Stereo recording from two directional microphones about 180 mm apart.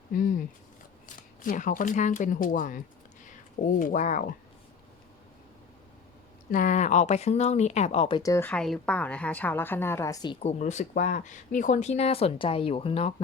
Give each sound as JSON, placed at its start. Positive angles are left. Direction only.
{"t": 0.1, "sound": "speech", "side_deg": 50}
{"t": 6.5, "sound": "speech", "side_deg": 45}
{"t": 10.4, "sound": "speech", "side_deg": 40}